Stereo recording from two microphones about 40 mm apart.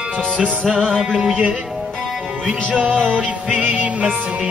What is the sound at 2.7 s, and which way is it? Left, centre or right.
Music, right.